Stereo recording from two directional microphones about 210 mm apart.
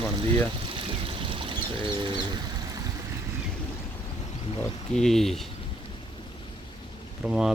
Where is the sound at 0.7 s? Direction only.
25° right (ahead or behind).